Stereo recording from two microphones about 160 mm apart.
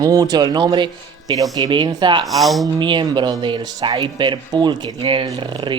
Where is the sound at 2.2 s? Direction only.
Centre (ahead or behind).